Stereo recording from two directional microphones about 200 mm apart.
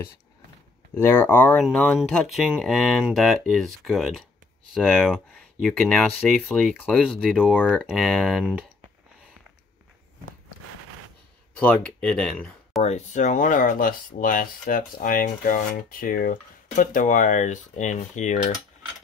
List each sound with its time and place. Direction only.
0.9 s speech: 10° left (ahead or behind)
11.6 s speech: 5° left (ahead or behind)
12.8 s speech: 35° left (ahead or behind)